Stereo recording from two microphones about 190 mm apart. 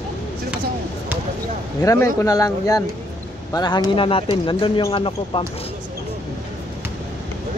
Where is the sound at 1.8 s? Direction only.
15° left (ahead or behind).